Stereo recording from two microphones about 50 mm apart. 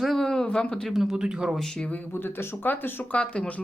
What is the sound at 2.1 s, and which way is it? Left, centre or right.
Speech, left.